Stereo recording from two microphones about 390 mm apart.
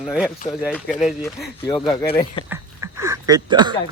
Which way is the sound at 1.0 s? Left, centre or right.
Centre.